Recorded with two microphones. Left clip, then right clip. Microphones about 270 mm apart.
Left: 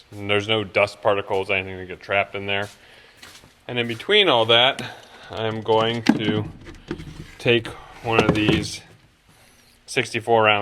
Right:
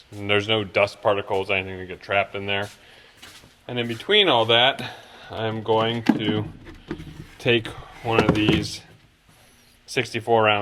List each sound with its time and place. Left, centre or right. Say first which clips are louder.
0.2 s speech: even; centre